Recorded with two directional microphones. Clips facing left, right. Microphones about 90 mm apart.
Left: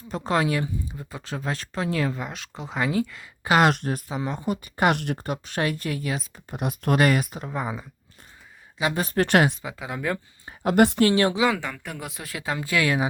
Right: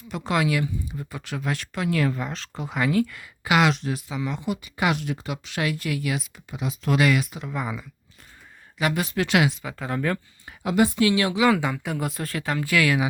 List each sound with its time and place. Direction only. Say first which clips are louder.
0.1 s speech: even; 35° left (ahead or behind)
3.5 s speech: left 1 dB; 50° left (ahead or behind)
4.9 s speech: left 1 dB; 55° left (ahead or behind); by 6.6 s 35° left (ahead or behind)
6.6 s speech: left 1 dB; 50° left (ahead or behind); by 7.9 s 30° left (ahead or behind)
9.0 s speech: left 3 dB; 40° left (ahead or behind)
9.7 s speech: right 2 dB; 10° left (ahead or behind)
10.6 s speech: left 2 dB; 55° left (ahead or behind); by 11.3 s 40° left (ahead or behind)
11.5 s speech: right 6 dB; 10° right (ahead or behind)
12.4 s speech: right 1 dB; 20° left (ahead or behind)